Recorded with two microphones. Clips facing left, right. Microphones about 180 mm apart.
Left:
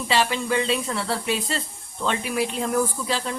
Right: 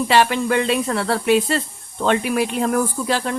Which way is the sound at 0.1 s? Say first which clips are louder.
Right 4 dB; 60° right (ahead or behind).